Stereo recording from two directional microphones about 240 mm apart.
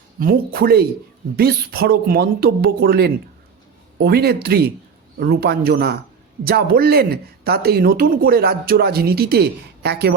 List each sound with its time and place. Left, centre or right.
0.2 s speech: right